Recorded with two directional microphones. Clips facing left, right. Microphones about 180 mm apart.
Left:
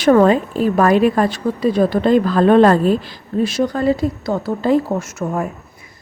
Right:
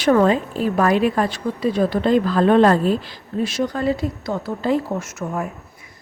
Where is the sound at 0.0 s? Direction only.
50° left (ahead or behind).